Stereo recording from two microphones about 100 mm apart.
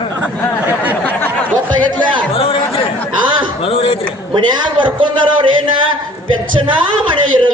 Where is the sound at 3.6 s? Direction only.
70° left (ahead or behind).